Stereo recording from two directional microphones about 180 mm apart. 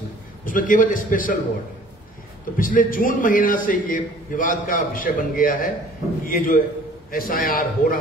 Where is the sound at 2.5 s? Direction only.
50° left (ahead or behind).